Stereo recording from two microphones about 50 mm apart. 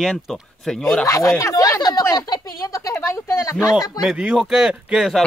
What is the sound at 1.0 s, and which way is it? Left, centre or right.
Speech, left.